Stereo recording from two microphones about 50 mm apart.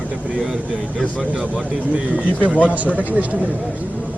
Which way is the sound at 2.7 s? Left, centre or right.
Right.